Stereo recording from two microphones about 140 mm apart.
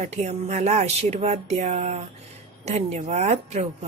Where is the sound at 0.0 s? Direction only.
50° right (ahead or behind).